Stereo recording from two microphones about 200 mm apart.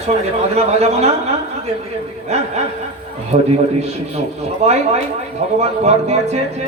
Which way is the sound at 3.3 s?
30° right (ahead or behind).